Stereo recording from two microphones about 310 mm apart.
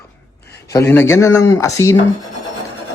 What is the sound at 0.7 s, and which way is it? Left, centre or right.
Speech, centre.